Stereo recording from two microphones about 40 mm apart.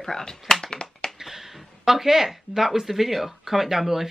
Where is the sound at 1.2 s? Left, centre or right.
Centre.